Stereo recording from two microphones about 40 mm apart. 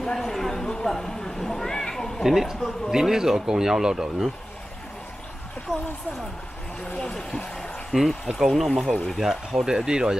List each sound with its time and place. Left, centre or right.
0.0 s a sound: centre
2.2 s speech: centre
7.2 s speech: left
7.9 s speech: centre
9.5 s speech: centre